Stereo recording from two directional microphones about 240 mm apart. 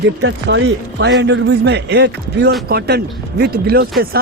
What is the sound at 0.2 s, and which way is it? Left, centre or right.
Speech, right.